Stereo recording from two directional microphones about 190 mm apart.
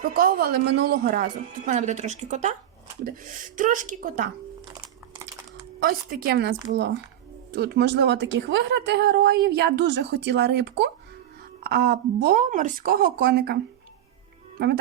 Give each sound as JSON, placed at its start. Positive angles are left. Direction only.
{"t": 0.0, "sound": "a woman's voice", "side_deg": -50}
{"t": 5.8, "sound": "a woman's voice", "side_deg": -50}